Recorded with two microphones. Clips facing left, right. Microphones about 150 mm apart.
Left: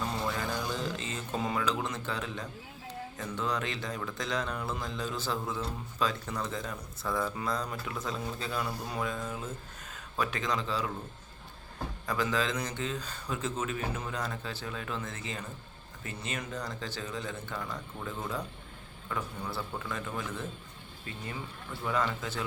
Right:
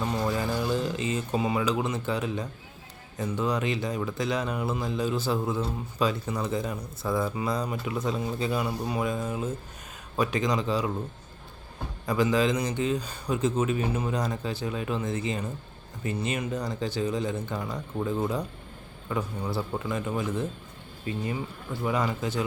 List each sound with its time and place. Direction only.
0.3 s music: 10° right (ahead or behind)
3.2 s a man's voice: 15° right (ahead or behind)
12.0 s a man's voice: 15° right (ahead or behind)
17.7 s a man's voice: 30° right (ahead or behind)
19.1 s a man's voice: 15° right (ahead or behind)
21.8 s a man's voice: 15° right (ahead or behind)